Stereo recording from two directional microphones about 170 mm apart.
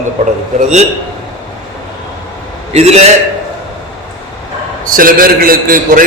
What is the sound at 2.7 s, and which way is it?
Speech, 40° right (ahead or behind).